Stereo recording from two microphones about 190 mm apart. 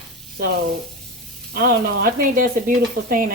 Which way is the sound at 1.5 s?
50° right (ahead or behind).